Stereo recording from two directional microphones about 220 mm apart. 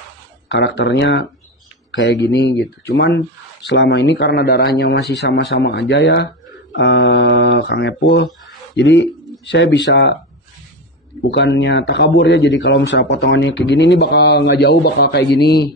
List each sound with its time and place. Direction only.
0.5 s a man's voice: 55° left (ahead or behind)
11.2 s a man's voice: 55° left (ahead or behind)